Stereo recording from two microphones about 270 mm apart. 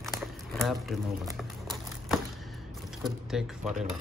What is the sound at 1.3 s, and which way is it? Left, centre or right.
Crumpling, centre.